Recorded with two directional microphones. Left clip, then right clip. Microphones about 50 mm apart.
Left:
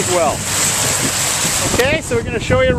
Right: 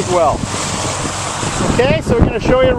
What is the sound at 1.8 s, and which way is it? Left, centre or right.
Speech, right.